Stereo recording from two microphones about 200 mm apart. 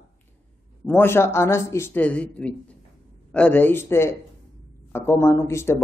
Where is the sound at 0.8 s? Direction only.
10° left (ahead or behind).